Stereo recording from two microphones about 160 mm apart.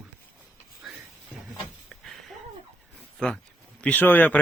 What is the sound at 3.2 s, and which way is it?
Speech, 5° left (ahead or behind).